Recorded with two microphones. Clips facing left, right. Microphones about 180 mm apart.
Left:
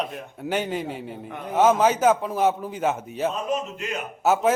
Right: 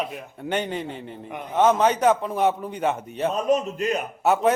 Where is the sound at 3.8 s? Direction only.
40° right (ahead or behind).